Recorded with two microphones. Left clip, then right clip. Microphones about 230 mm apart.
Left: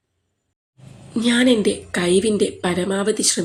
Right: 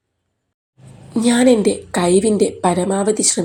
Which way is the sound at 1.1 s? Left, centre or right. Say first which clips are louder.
Right 3 dB; centre.